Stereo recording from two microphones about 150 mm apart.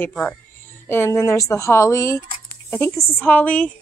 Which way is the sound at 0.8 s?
15° left (ahead or behind).